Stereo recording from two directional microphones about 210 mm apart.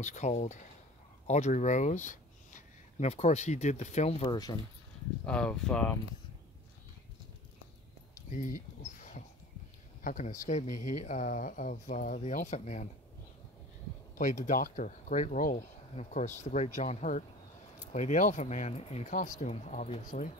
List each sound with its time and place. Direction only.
0.0 s speech: 35° left (ahead or behind)
5.2 s speech: 5° left (ahead or behind)
8.4 s speech: 40° left (ahead or behind)
14.1 s speech: 35° left (ahead or behind)